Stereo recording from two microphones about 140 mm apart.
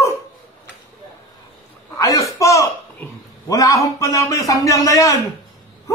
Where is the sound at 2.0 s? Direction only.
25° left (ahead or behind).